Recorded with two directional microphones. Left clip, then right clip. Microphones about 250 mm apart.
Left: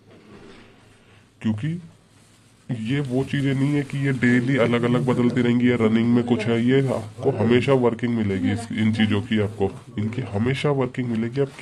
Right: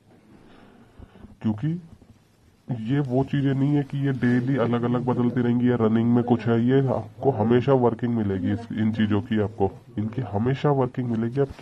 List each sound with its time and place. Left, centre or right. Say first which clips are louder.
1.4 s speech: left 1 dB; centre
2.7 s speech: even; centre